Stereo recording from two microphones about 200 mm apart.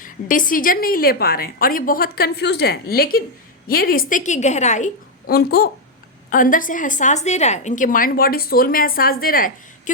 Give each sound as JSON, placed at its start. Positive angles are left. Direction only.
{"t": 0.0, "sound": "a woman's voice", "side_deg": 40}